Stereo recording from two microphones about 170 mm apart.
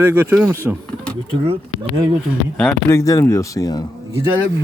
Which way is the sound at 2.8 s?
15° left (ahead or behind).